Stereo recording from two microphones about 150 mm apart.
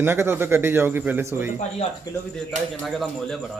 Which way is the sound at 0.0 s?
15° right (ahead or behind).